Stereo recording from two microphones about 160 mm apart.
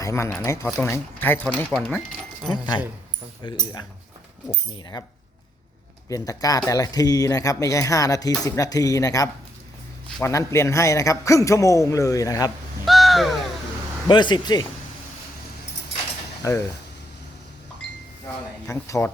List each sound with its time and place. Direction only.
0.0 s speech: 20° left (ahead or behind)
2.5 s a man's voice: 25° left (ahead or behind)
4.7 s a man's voice: 25° left (ahead or behind)
6.1 s a man's voice: 20° left (ahead or behind)
12.8 s crow: centre (ahead or behind)
14.1 s a man's voice: 30° left (ahead or behind)
16.4 s speech: 20° left (ahead or behind)
18.7 s speech: 20° left (ahead or behind)